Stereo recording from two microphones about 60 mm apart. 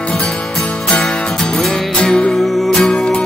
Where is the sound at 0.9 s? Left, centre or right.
Centre.